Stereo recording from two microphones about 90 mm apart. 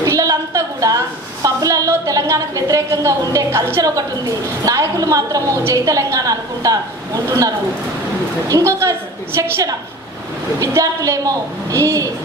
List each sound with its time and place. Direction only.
0.0 s a woman's voice: 40° right (ahead or behind)
8.5 s a woman's voice: 35° right (ahead or behind)